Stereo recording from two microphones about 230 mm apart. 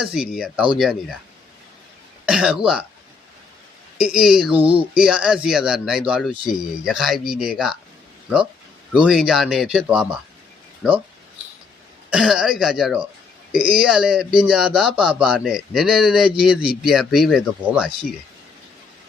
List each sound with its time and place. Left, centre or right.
0.0 s speech: centre
2.2 s speech: centre
3.9 s speech: centre
4.5 s speech: right
4.8 s speech: centre
8.9 s speech: centre
12.1 s speech: centre